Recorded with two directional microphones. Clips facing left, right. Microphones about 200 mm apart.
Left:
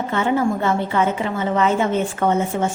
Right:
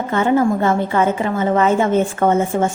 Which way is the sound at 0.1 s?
50° right (ahead or behind).